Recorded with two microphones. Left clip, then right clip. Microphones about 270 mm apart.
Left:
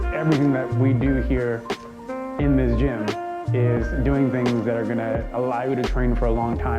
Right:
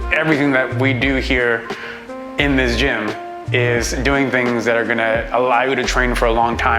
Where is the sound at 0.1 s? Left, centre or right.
Centre.